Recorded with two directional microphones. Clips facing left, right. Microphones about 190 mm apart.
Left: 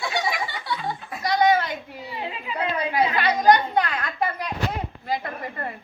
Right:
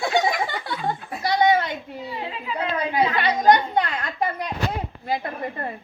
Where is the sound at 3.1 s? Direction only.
25° right (ahead or behind).